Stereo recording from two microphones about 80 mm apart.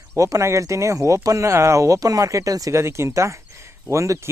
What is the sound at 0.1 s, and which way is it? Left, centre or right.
Speech, right.